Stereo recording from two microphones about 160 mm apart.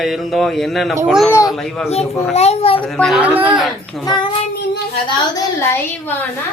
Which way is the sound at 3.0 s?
Centre (ahead or behind).